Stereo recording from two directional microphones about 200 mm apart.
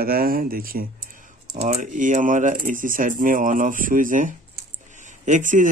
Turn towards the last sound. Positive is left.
turn(degrees=-40)  # may be behind; listen again after turning